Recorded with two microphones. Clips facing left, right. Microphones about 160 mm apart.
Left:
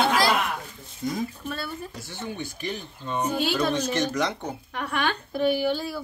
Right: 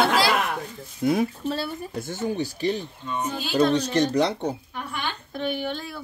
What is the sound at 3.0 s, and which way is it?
Speech, 35° left (ahead or behind).